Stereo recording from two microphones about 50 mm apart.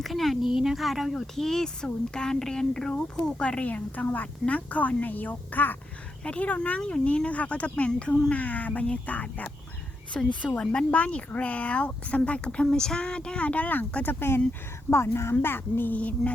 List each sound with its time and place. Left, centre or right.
0.0 s a sound: centre
0.4 s speech: centre
1.4 s a child's voice: centre; by 5.7 s left
6.2 s speech: left
8.3 s a woman's voice: left; by 10.8 s centre
10.9 s speech: left
13.9 s a woman's voice: left
16.0 s speech: left